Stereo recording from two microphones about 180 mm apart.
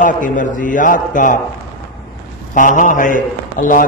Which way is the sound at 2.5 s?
45° left (ahead or behind).